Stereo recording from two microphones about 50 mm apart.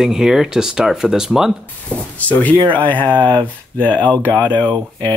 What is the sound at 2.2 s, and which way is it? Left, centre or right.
Speech, left.